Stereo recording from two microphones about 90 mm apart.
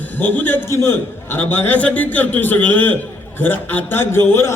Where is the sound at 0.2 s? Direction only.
20° left (ahead or behind).